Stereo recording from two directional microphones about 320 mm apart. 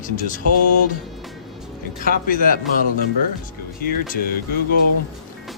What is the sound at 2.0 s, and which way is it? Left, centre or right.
Speech, left.